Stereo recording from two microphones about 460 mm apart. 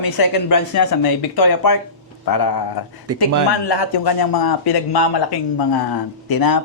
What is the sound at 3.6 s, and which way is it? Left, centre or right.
A woman's voice, left.